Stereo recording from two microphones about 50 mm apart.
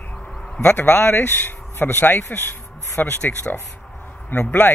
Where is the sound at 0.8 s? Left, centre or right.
Left.